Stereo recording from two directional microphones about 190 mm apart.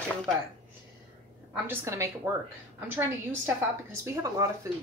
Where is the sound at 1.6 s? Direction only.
15° right (ahead or behind).